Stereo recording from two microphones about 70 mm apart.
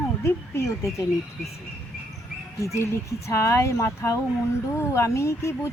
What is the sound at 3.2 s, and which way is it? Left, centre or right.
Speech, left.